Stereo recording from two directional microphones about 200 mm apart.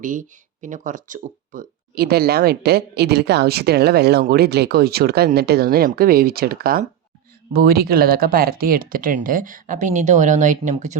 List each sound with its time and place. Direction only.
0.0 s speech: 40° right (ahead or behind)